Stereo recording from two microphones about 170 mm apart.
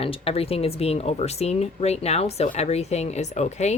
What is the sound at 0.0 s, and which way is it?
Speech, 35° left (ahead or behind).